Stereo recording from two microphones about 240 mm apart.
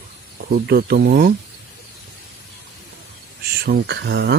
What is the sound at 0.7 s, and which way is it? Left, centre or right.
Speech, right.